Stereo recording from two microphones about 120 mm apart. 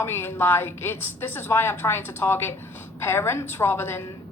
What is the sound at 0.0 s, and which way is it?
A woman's voice, 20° left (ahead or behind).